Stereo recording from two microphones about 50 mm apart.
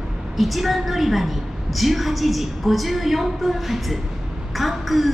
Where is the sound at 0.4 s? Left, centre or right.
Centre.